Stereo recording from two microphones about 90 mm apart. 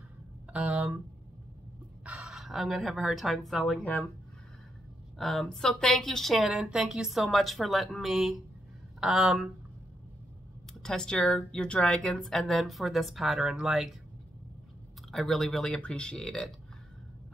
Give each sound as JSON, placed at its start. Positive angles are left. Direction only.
{"t": 0.5, "sound": "speech", "side_deg": -15}
{"t": 2.0, "sound": "speech", "side_deg": -10}
{"t": 3.8, "sound": "speech", "side_deg": 15}
{"t": 5.2, "sound": "speech", "side_deg": 5}
{"t": 10.7, "sound": "speech", "side_deg": 5}
{"t": 15.0, "sound": "speech", "side_deg": 5}